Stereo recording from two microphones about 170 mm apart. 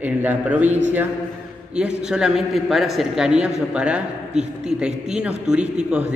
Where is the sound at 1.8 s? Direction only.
5° right (ahead or behind).